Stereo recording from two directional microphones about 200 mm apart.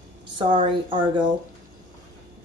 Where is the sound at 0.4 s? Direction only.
25° right (ahead or behind).